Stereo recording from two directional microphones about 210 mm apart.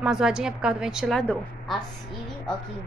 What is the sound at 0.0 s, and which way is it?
A woman's voice, 5° right (ahead or behind).